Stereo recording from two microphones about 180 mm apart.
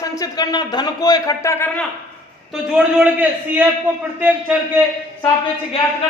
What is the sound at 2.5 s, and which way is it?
A man's voice, 5° right (ahead or behind).